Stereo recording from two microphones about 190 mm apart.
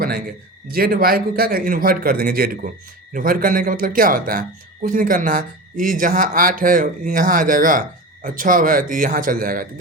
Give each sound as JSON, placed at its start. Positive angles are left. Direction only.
{"t": 0.7, "sound": "a man's voice", "side_deg": -50}